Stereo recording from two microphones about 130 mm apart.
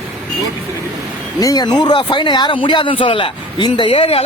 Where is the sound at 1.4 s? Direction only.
30° left (ahead or behind).